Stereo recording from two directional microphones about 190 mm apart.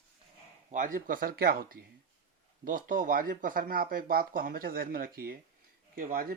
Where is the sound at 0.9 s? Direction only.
45° right (ahead or behind).